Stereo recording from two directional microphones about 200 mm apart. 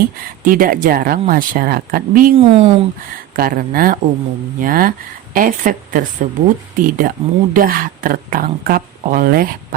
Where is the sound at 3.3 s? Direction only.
45° right (ahead or behind).